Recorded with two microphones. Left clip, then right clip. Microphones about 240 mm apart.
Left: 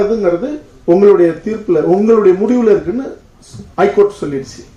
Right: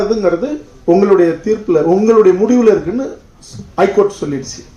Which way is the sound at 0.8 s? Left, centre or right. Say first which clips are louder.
Left 2 dB; right.